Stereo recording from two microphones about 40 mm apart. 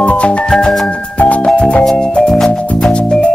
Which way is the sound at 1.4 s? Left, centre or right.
Centre.